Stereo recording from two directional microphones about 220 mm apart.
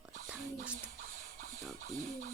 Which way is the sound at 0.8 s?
35° right (ahead or behind).